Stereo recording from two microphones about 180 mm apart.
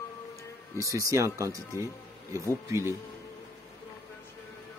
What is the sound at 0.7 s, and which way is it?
Speech, 20° right (ahead or behind).